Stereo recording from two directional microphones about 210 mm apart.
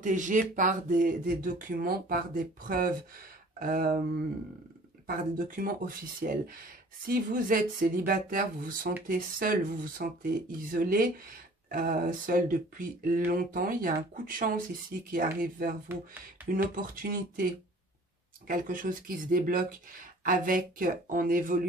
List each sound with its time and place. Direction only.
0.0 s speech: 35° right (ahead or behind)
5.0 s speech: 40° right (ahead or behind)
18.5 s speech: 40° right (ahead or behind)